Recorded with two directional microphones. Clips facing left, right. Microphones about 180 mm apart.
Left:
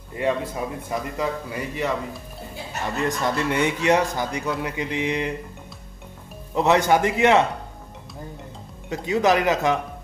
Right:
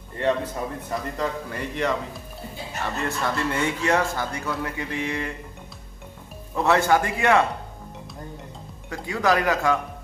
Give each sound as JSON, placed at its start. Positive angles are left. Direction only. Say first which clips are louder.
{"t": 0.1, "sound": "speech", "louder": "even", "side_deg": 10}
{"t": 2.8, "sound": "speech", "louder": "left 3 dB", "side_deg": 15}
{"t": 6.5, "sound": "speech", "louder": "left 2 dB", "side_deg": 20}
{"t": 8.8, "sound": "speech", "louder": "left 3 dB", "side_deg": 20}